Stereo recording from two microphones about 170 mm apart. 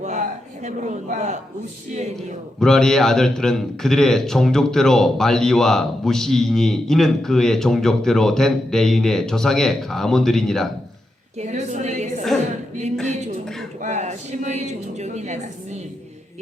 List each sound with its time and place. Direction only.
0.6 s a woman's voice: 45° right (ahead or behind)
2.6 s a man's voice: 5° left (ahead or behind)
11.3 s a sound: 45° right (ahead or behind)
13.1 s a woman's voice: 40° right (ahead or behind)